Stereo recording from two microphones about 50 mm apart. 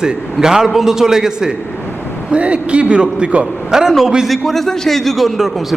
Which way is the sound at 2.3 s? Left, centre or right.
Right.